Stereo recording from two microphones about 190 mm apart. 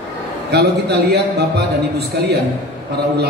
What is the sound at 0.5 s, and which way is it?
A man's voice, 60° right (ahead or behind).